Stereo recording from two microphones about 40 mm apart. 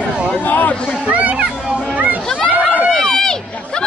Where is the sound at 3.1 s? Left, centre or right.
Centre.